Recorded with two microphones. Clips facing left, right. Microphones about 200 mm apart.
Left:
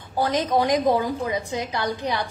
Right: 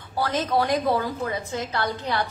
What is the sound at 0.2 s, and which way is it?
A woman's voice, 15° left (ahead or behind).